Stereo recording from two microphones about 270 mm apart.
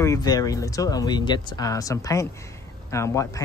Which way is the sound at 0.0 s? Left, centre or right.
Centre.